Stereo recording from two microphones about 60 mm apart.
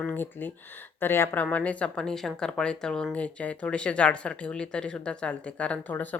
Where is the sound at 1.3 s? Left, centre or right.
Left.